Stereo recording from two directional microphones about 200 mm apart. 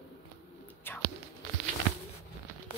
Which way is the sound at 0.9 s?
10° left (ahead or behind).